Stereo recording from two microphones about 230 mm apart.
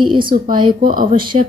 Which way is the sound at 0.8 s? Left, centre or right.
Right.